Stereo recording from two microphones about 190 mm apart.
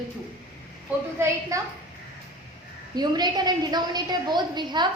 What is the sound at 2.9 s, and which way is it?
A woman's voice, 20° right (ahead or behind).